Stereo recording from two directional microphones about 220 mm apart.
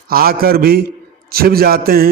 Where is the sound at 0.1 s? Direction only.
45° right (ahead or behind).